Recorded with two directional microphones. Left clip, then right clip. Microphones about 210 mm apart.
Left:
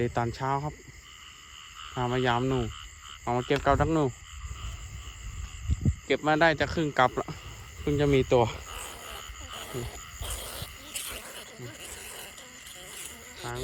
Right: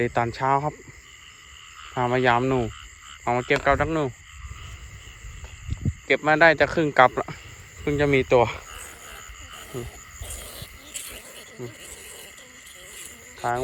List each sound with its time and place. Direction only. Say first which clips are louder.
0.0 s cricket: right 6 dB; 15° left (ahead or behind)
2.0 s cricket: right 7 dB; 10° left (ahead or behind)
2.6 s frog: right 4 dB; 45° left (ahead or behind)
3.2 s cricket: right 5 dB; 15° left (ahead or behind)
5.7 s speech: right 6 dB; 15° left (ahead or behind)
7.9 s cricket: right 4 dB; 15° left (ahead or behind)
8.8 s a sound: even; 30° left (ahead or behind)
10.2 s frog: left 2 dB; 30° left (ahead or behind)
10.6 s a sound: even; centre (ahead or behind)